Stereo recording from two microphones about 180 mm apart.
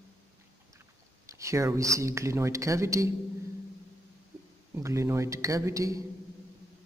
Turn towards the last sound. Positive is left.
turn(degrees=-20)  # may be behind; listen again after turning